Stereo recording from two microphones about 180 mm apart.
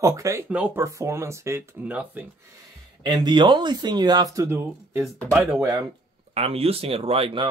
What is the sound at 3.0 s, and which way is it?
Speech, 25° right (ahead or behind).